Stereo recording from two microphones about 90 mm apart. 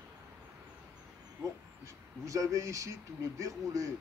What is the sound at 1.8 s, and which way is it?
Speech, 35° right (ahead or behind).